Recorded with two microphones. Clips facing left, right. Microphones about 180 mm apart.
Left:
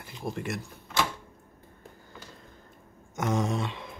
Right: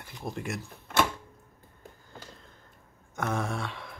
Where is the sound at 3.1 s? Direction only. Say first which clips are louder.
Left 3 dB; 15° left (ahead or behind).